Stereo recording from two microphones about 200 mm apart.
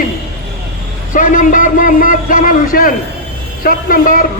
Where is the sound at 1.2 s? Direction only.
40° left (ahead or behind).